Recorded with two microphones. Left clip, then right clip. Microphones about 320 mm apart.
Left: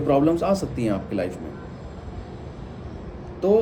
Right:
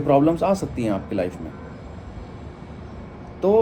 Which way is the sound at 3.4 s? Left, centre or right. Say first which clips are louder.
Right 2 dB; centre.